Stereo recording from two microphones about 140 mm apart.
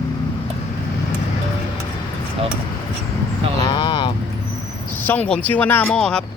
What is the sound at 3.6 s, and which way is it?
Vehicle, 35° left (ahead or behind).